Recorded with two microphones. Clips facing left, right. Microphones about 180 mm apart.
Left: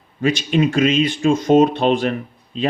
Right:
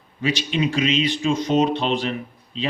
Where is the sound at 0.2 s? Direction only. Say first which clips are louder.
Left 5 dB; 50° left (ahead or behind).